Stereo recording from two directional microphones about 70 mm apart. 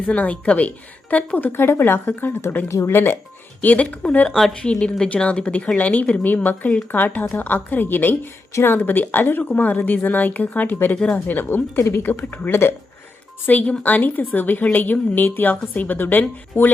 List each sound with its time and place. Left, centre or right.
0.2 s speech: left
1.5 s speech: left
2.6 s speech: left
4.3 s speech: centre; by 10.9 s left
10.9 s speech: centre
11.3 s speech: left
13.4 s speech: left